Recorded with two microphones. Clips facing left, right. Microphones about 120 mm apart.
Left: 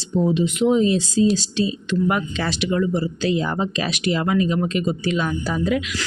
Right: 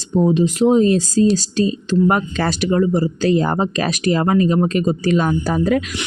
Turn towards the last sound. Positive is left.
turn(degrees=-45)  # may be behind; listen again after turning